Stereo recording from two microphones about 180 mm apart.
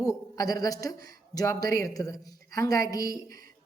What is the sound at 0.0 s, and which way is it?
A man's voice, 20° left (ahead or behind).